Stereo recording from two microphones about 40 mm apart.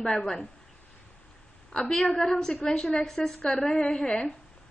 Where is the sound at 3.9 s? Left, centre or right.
Centre.